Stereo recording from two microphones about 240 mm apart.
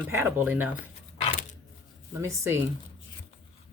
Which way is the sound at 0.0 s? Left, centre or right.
Centre.